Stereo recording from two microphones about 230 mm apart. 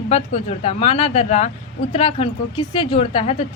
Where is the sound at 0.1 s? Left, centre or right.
Left.